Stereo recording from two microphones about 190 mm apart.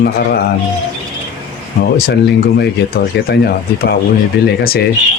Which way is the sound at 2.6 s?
60° left (ahead or behind).